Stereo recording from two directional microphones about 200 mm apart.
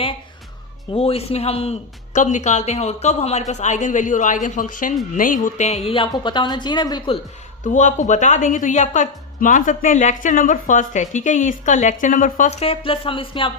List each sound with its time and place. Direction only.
0.9 s a woman's voice: 30° left (ahead or behind)
7.6 s a woman's voice: 40° left (ahead or behind)